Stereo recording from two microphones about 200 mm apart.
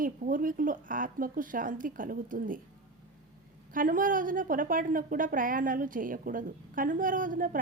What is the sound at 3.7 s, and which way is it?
A woman's voice, 45° right (ahead or behind).